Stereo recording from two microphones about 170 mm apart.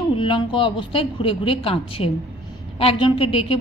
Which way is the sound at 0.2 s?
30° left (ahead or behind).